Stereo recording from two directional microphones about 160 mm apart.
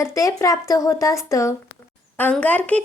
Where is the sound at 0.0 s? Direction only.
20° left (ahead or behind).